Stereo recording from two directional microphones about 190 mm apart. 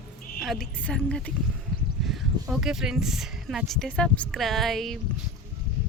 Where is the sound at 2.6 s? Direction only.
5° right (ahead or behind).